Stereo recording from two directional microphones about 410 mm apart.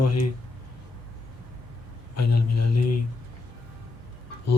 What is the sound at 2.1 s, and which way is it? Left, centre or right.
Speech, left.